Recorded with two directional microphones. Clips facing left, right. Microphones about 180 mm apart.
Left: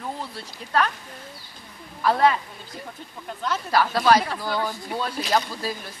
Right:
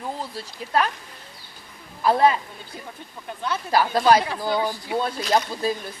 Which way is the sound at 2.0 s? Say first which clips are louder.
Right 2 dB; 20° right (ahead or behind).